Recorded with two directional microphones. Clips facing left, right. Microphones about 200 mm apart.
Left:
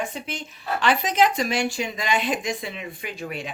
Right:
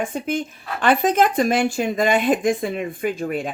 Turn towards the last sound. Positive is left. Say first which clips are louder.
# right 9 dB
turn(degrees=-50)  # may be behind; listen again after turning